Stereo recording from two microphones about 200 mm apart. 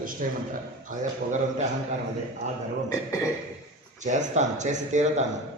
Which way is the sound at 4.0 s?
35° right (ahead or behind).